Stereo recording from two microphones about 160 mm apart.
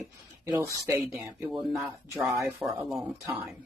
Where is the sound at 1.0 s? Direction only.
Centre (ahead or behind).